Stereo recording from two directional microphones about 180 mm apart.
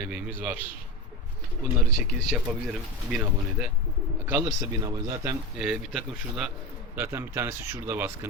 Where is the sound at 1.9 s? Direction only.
Centre (ahead or behind).